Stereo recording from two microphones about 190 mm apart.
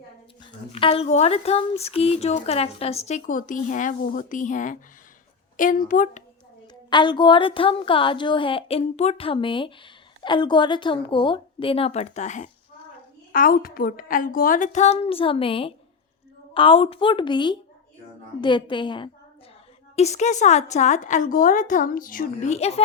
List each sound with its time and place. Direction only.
0.7 s a woman's voice: 30° left (ahead or behind)
6.9 s a woman's voice: 25° left (ahead or behind)
20.0 s speech: 35° left (ahead or behind)